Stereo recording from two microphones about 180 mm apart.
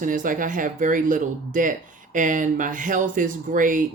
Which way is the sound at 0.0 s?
45° right (ahead or behind).